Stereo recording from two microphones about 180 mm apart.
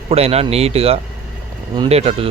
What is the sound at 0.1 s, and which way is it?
Speech, 35° right (ahead or behind).